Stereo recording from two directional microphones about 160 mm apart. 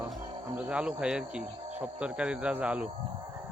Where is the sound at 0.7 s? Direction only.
5° right (ahead or behind).